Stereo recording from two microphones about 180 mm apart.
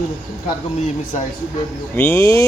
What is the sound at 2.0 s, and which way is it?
Speech, 15° left (ahead or behind).